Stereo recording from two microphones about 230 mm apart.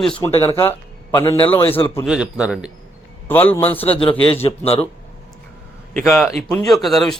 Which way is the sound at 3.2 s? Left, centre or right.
Centre.